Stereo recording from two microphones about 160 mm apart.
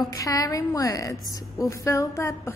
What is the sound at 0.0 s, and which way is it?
A woman's voice, 20° left (ahead or behind).